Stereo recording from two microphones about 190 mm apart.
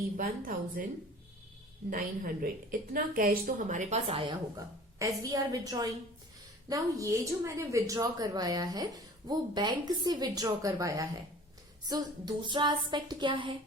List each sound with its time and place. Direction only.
0.2 s a woman's voice: 45° right (ahead or behind)
1.9 s a woman's voice: 50° right (ahead or behind); by 4.4 s 30° right (ahead or behind)
4.9 s a woman's voice: 20° right (ahead or behind)